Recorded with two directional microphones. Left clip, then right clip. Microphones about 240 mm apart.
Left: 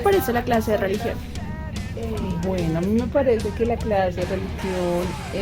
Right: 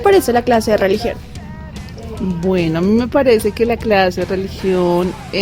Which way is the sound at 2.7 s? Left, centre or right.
Right.